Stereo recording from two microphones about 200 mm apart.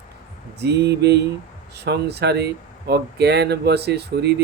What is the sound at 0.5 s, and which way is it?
Speech, 55° right (ahead or behind).